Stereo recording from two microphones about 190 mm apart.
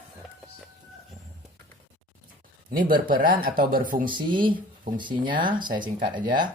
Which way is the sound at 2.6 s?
50° right (ahead or behind).